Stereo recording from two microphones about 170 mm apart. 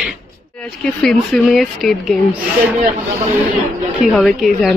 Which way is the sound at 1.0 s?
Centre (ahead or behind).